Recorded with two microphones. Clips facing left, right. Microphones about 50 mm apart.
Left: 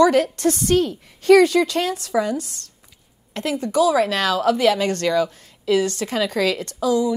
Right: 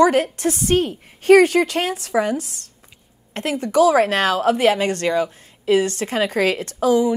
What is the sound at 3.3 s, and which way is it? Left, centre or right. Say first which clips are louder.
A woman's voice: right 2 dB; right.